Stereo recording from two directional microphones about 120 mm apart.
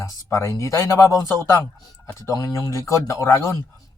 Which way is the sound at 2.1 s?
30° left (ahead or behind).